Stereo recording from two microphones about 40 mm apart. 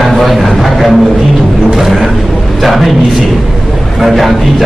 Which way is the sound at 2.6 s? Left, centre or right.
Centre.